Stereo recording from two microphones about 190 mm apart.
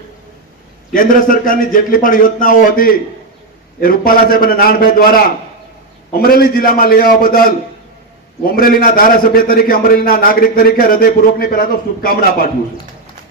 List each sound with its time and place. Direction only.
0.9 s a man's voice: 45° left (ahead or behind)